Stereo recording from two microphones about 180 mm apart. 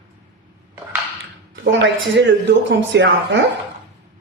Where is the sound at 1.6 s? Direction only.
80° right.